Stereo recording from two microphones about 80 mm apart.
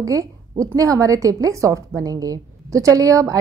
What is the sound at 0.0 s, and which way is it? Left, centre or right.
A woman's voice, right.